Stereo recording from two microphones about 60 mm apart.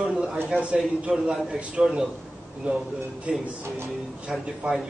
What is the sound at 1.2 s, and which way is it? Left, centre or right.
Speech, centre.